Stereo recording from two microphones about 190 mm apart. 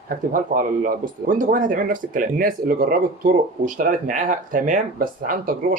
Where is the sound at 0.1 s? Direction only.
45° right (ahead or behind).